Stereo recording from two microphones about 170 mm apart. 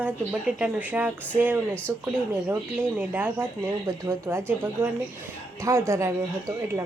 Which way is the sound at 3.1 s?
10° right (ahead or behind).